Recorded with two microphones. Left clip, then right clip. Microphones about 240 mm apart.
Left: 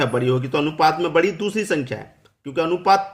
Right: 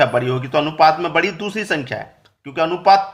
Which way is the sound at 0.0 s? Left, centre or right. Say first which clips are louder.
Right 4 dB; centre.